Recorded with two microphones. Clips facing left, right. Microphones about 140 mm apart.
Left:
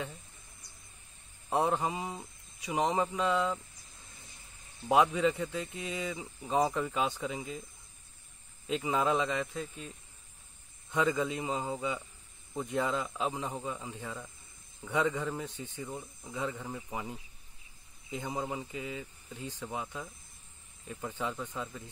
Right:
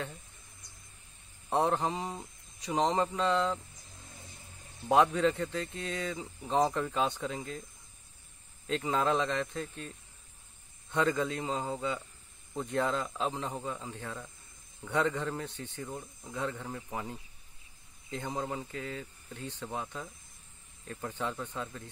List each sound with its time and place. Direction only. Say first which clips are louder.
1.5 s a man's voice: right 1 dB; 10° left (ahead or behind)
4.8 s a man's voice: right 1 dB; 10° left (ahead or behind)
8.6 s a man's voice: even; 10° left (ahead or behind)